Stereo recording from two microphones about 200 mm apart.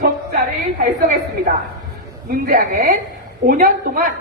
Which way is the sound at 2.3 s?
50° right (ahead or behind).